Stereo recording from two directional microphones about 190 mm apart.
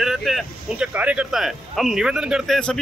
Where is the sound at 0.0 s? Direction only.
Centre (ahead or behind).